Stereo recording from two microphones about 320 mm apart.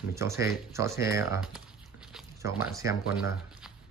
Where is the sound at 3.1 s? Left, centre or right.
Centre.